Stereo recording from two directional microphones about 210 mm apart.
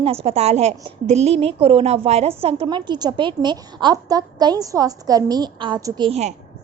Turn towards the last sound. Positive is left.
turn(degrees=-30)  # may be behind; listen again after turning